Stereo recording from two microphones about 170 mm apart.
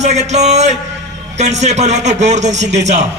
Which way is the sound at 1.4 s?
40° right (ahead or behind).